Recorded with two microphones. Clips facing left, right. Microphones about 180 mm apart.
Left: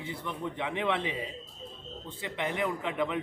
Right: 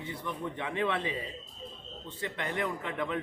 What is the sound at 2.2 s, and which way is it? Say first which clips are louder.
A man's voice: left 2 dB; 15° left (ahead or behind).